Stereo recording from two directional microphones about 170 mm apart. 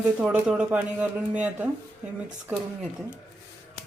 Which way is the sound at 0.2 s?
5° right (ahead or behind).